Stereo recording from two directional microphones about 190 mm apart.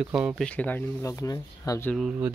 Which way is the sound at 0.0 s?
5° right (ahead or behind).